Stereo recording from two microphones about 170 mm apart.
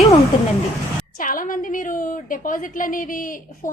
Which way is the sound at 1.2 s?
55° left (ahead or behind).